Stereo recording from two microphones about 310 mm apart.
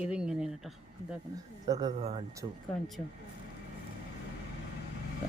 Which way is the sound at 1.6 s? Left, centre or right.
Centre.